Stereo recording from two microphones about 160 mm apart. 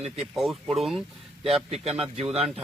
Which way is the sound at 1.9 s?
40° right (ahead or behind).